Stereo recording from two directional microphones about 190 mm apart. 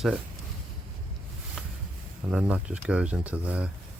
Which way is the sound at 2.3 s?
5° right (ahead or behind).